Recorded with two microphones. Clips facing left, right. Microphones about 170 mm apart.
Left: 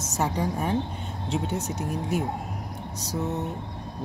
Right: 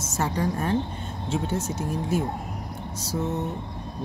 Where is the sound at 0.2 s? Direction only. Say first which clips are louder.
Right 1 dB; 10° left (ahead or behind).